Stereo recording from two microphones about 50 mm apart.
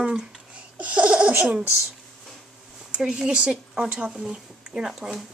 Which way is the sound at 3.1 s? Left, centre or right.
Centre.